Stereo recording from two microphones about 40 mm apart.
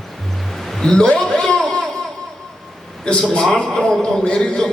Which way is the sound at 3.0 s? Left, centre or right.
Left.